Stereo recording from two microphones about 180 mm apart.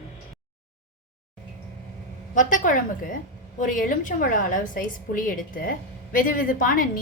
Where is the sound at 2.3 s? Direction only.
45° left (ahead or behind).